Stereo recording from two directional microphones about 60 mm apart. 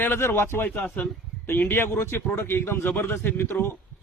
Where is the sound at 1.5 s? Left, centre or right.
Left.